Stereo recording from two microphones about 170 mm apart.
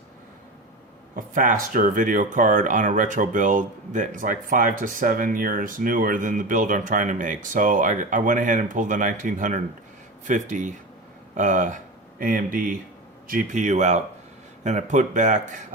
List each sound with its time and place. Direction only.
1.1 s speech: 50° right (ahead or behind)